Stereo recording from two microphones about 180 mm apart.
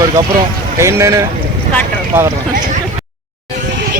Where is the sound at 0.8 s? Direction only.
15° right (ahead or behind).